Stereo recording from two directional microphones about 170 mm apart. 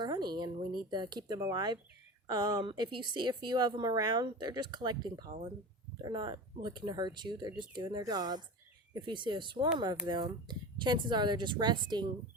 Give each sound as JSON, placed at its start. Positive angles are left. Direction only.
{"t": 0.0, "sound": "a woman's voice", "side_deg": -25}